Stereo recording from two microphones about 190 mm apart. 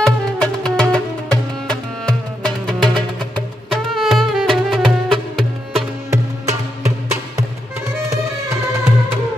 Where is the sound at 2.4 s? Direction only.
Centre (ahead or behind).